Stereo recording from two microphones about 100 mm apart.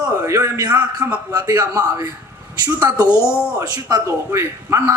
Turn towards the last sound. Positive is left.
turn(degrees=-30)  # may be behind; listen again after turning